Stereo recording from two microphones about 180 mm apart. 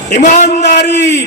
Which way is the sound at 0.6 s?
70° left (ahead or behind).